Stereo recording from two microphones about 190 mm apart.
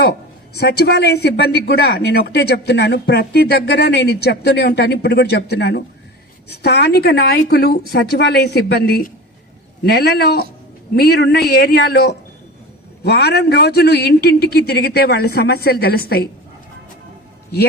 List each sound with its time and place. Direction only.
0.5 s speech: 60° left (ahead or behind)